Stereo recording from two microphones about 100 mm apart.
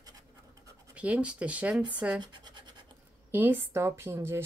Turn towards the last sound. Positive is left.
turn(degrees=-25)  # may be behind; listen again after turning